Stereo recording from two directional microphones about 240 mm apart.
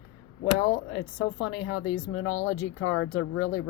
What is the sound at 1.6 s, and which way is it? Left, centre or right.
Speech, left.